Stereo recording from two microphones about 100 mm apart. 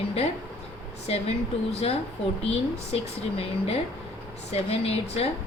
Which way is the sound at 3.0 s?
85° left.